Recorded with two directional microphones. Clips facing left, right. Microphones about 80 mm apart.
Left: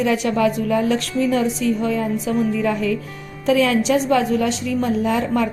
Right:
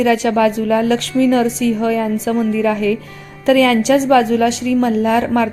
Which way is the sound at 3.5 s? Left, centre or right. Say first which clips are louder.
Right 5 dB; right.